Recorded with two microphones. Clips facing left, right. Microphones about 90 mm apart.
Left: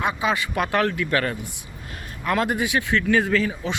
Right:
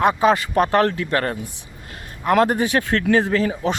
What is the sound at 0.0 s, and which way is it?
Speech, 45° right (ahead or behind).